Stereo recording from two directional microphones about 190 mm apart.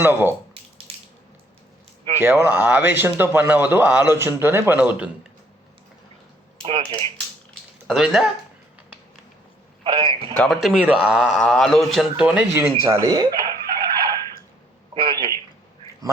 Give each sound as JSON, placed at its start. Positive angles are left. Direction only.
{"t": 0.0, "sound": "a man's voice", "side_deg": -10}
{"t": 2.2, "sound": "a man's voice", "side_deg": -10}
{"t": 6.6, "sound": "speech", "side_deg": -25}
{"t": 7.9, "sound": "a man's voice", "side_deg": 0}
{"t": 9.8, "sound": "a man's voice", "side_deg": -25}
{"t": 10.3, "sound": "a man's voice", "side_deg": 5}